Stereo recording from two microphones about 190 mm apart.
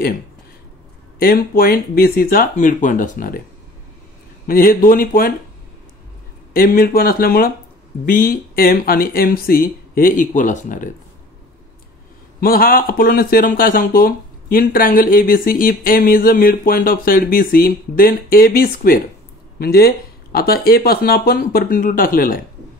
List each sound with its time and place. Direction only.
1.2 s speech: 50° left (ahead or behind)
4.5 s speech: 50° left (ahead or behind)
6.5 s speech: 50° left (ahead or behind)
12.4 s speech: 50° left (ahead or behind)